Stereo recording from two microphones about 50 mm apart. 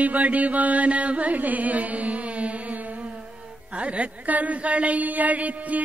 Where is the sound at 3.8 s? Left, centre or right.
Right.